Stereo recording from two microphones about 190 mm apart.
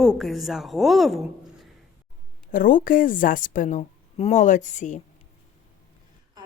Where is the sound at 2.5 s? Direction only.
45° left (ahead or behind).